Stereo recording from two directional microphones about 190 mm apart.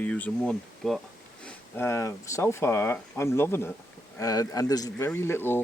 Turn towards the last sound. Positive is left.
turn(degrees=10)  # may be behind; listen again after turning